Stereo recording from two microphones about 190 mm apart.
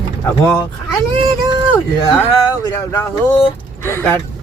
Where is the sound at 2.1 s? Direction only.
20° left (ahead or behind).